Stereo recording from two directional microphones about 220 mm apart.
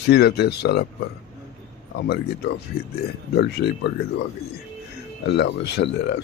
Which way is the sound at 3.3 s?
50° left (ahead or behind).